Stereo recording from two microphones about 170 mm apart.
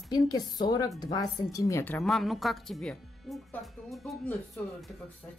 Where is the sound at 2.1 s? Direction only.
Centre (ahead or behind).